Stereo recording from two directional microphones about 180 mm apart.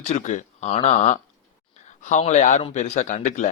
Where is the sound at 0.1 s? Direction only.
40° left (ahead or behind).